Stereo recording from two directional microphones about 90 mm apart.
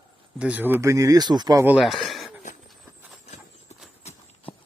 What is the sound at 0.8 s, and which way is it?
Speech, 35° right (ahead or behind).